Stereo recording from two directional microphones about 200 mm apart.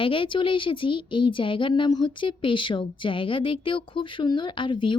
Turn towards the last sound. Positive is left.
turn(degrees=25)  # may be behind; listen again after turning